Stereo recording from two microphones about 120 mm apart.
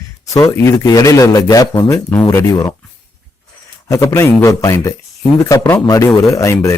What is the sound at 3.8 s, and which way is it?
A man's voice, 25° left (ahead or behind).